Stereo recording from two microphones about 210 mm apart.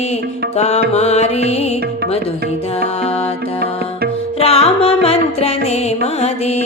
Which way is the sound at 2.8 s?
30° left (ahead or behind).